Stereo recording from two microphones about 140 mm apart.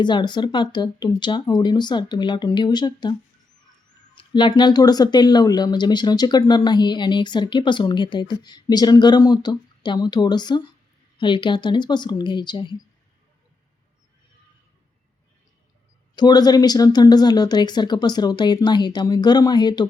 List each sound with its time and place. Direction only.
0.0 s speech: 35° left (ahead or behind)
4.2 s speech: 35° left (ahead or behind)
16.1 s speech: 30° left (ahead or behind)